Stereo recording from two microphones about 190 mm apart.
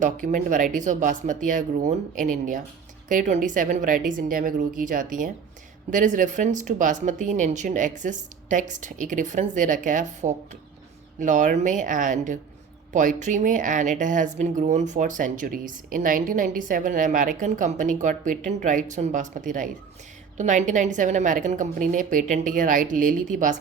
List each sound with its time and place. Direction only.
0.0 s a woman's voice: 40° right (ahead or behind)